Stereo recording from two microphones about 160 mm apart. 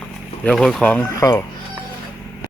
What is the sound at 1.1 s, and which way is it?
Speech, 20° left (ahead or behind).